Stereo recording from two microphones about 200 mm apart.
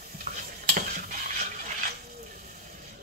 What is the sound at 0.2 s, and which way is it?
Stir, 40° right (ahead or behind).